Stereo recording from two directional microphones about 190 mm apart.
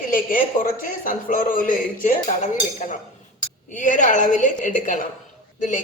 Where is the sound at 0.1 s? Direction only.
45° left (ahead or behind).